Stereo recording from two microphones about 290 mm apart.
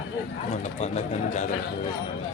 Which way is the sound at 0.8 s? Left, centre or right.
Left.